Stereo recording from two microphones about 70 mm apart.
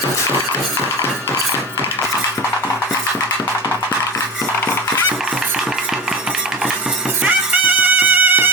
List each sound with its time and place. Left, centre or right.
7.3 s music: right